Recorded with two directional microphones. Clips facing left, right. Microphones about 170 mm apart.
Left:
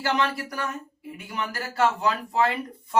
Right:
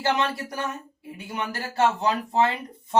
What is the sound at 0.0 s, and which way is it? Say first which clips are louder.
Speech: right 1 dB; 25° right (ahead or behind).